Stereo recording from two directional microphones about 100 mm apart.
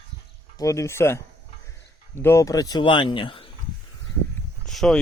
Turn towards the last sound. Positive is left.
turn(degrees=0)  # may be behind; listen again after turning